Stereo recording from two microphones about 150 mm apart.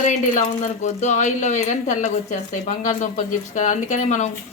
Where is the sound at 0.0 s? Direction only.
55° left (ahead or behind).